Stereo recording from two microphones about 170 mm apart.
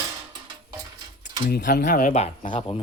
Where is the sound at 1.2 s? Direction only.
60° left (ahead or behind).